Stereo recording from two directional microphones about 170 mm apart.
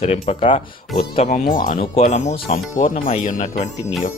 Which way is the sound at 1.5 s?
50° left (ahead or behind).